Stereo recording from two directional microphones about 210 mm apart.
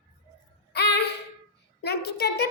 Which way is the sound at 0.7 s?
50° left (ahead or behind).